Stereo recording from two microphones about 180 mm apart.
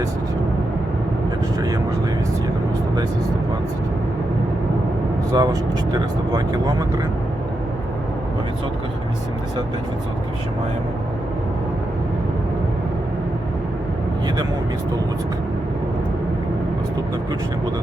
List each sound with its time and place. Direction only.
5.3 s speech: 20° right (ahead or behind)